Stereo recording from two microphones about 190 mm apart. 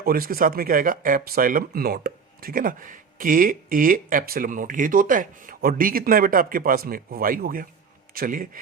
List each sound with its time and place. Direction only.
0.0 s speech: 50° right (ahead or behind)